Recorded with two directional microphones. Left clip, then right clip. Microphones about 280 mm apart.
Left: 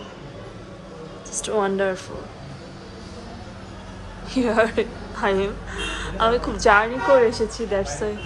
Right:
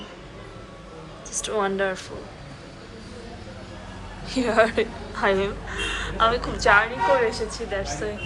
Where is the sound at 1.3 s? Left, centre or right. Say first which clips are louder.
Left 2 dB; centre.